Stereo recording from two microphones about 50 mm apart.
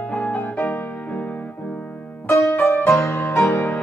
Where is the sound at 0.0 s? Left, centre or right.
Left.